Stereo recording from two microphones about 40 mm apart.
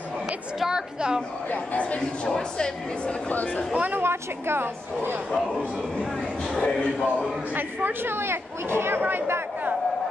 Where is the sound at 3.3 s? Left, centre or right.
Left.